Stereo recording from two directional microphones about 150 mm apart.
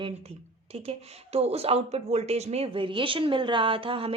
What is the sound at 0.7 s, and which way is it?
Speech, 40° right (ahead or behind).